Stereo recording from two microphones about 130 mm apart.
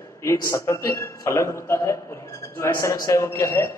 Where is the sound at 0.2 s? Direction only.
25° left (ahead or behind).